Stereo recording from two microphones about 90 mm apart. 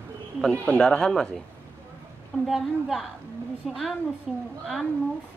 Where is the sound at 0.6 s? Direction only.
15° left (ahead or behind).